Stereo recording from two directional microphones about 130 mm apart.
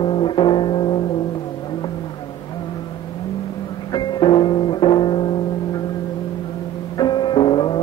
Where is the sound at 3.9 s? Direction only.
35° left (ahead or behind).